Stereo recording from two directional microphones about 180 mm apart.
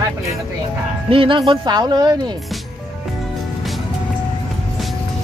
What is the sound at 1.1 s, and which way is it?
Speech, 30° right (ahead or behind).